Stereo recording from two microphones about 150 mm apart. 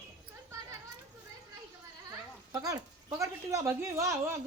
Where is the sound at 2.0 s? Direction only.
25° right (ahead or behind).